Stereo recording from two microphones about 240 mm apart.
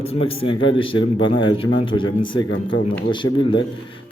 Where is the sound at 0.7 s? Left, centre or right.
Left.